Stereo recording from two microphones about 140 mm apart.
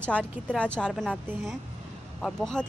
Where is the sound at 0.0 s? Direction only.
5° left (ahead or behind).